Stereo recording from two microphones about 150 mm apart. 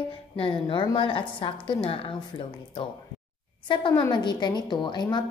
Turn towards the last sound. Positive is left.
turn(degrees=30)  # may be behind; listen again after turning